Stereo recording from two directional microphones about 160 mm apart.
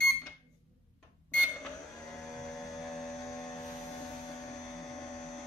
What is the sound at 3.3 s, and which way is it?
Aircraft, 5° left (ahead or behind).